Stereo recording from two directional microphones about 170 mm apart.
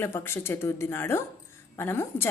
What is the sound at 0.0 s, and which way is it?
A woman's voice, 15° left (ahead or behind).